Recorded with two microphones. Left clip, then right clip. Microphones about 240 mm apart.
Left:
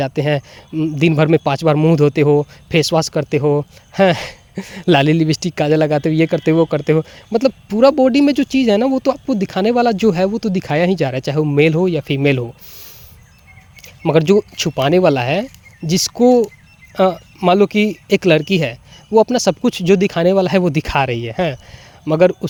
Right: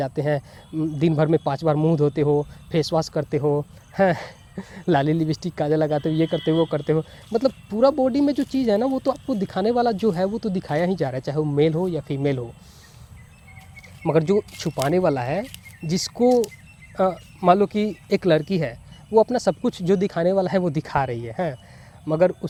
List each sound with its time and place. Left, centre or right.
0.0 s speech: left
13.8 s speech: left